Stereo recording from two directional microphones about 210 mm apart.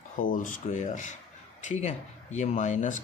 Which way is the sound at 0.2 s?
40° left (ahead or behind).